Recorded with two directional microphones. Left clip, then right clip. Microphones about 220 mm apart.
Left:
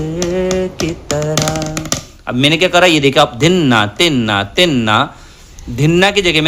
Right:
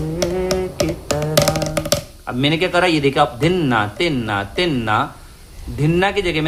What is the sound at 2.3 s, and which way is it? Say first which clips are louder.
A man's voice: left 6 dB; 40° left (ahead or behind).